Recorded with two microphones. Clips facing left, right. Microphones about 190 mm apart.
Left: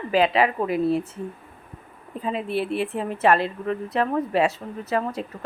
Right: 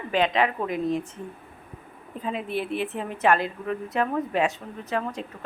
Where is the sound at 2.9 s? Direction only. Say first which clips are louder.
Left 2 dB; centre (ahead or behind).